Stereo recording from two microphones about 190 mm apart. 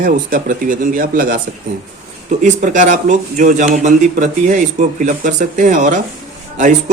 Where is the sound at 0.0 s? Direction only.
45° right (ahead or behind).